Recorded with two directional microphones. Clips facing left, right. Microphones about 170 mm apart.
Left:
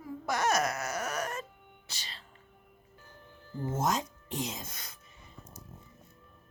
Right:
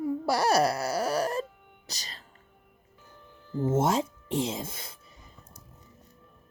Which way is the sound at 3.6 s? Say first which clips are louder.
Right 6 dB; 25° right (ahead or behind).